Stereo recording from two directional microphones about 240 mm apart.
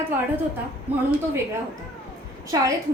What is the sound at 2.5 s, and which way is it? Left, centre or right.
Speech, centre.